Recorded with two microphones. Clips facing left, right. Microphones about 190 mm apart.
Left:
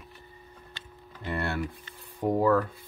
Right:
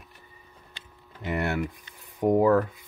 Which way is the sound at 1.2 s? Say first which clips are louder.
Right 3 dB; 15° right (ahead or behind).